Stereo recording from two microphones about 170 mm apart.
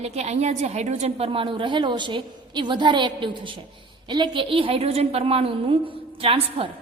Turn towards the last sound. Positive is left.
turn(degrees=-35)  # may be behind; listen again after turning